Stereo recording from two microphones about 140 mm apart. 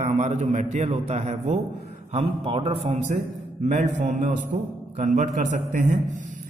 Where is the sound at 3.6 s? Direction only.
60° right (ahead or behind).